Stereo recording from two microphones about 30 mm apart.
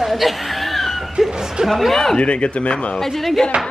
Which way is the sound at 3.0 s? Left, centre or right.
Centre.